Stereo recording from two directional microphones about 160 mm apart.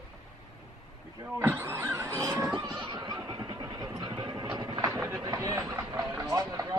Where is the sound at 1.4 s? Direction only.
15° right (ahead or behind).